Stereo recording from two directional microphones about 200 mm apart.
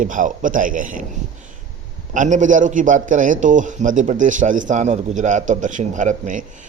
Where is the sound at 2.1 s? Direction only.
40° right (ahead or behind).